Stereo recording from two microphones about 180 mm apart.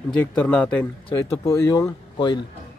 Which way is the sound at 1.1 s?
15° left (ahead or behind).